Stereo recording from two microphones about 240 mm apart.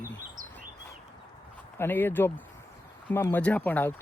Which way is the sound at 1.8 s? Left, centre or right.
Centre.